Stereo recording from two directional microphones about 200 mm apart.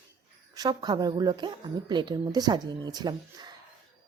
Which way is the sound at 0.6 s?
20° right (ahead or behind).